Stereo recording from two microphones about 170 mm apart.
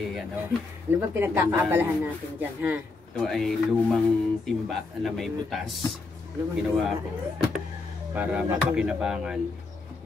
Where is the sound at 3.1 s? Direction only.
Centre (ahead or behind).